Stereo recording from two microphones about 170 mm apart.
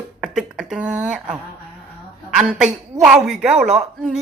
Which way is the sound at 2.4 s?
5° right (ahead or behind).